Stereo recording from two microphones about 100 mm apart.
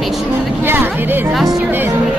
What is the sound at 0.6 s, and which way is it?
Speech, 20° right (ahead or behind).